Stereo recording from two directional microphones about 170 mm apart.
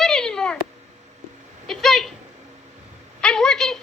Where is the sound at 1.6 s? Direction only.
Centre (ahead or behind).